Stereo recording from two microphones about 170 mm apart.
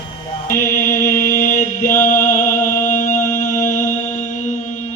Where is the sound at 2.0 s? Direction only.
50° left (ahead or behind).